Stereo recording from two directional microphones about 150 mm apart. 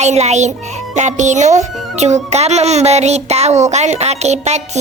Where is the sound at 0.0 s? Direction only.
50° right (ahead or behind).